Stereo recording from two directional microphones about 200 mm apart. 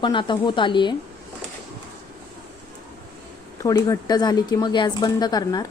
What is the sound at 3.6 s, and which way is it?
Speech, 15° left (ahead or behind).